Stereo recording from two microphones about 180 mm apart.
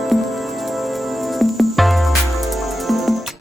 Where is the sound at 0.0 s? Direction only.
Centre (ahead or behind).